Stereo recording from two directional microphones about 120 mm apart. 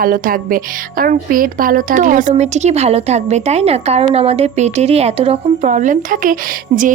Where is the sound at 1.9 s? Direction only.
90° right.